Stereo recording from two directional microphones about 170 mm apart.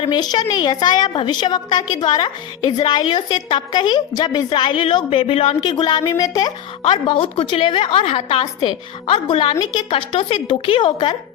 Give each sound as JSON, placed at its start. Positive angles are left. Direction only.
{"t": 0.0, "sound": "a woman's voice", "side_deg": 25}